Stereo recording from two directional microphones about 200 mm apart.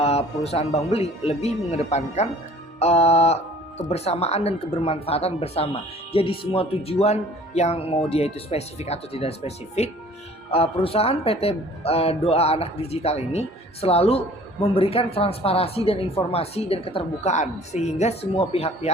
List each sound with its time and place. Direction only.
0.0 s speech: 30° left (ahead or behind)